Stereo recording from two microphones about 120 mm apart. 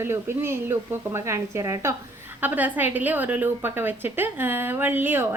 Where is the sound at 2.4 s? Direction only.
15° right (ahead or behind).